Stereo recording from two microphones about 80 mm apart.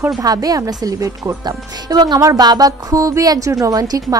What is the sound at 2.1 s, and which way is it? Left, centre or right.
A woman's voice, right.